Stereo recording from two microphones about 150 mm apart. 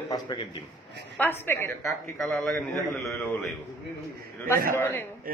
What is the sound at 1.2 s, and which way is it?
Speech, 15° left (ahead or behind).